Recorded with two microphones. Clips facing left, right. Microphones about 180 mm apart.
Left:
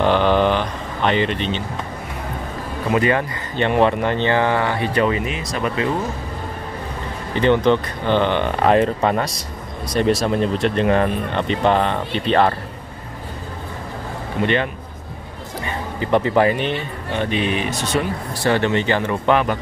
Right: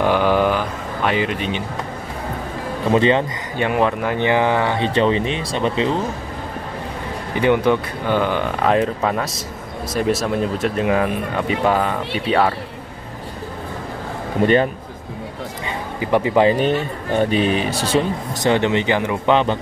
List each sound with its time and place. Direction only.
0.0 s a sound: 10° right (ahead or behind)
2.9 s speech: 25° right (ahead or behind)
3.5 s speech: 5° right (ahead or behind); by 5.9 s 30° right (ahead or behind)
7.3 s speech: 10° right (ahead or behind)
14.4 s speech: 40° right (ahead or behind)
15.6 s music: 10° right (ahead or behind)
16.5 s speech: 40° right (ahead or behind)
18.3 s speech: 20° right (ahead or behind)